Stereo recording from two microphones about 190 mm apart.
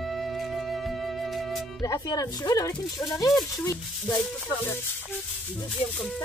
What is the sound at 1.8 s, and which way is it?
Speech, 20° left (ahead or behind).